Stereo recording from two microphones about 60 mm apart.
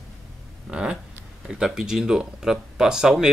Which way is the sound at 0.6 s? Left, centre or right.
Centre.